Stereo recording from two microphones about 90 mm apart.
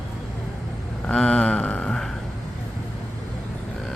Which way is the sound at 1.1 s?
10° left (ahead or behind).